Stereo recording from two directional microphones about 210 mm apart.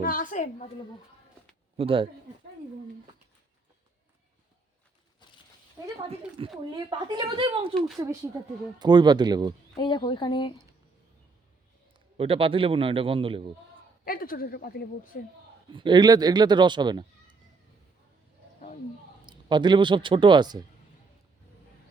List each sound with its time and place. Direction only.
0.0 s a woman's voice: 40° left (ahead or behind)
1.7 s speech: 25° right (ahead or behind)
6.7 s speech: 20° right (ahead or behind)
9.7 s speech: 20° left (ahead or behind)
12.1 s speech: 25° right (ahead or behind)
14.0 s a woman's voice: 45° left (ahead or behind)
15.7 s speech: 20° right (ahead or behind)
19.2 s speech: 20° right (ahead or behind)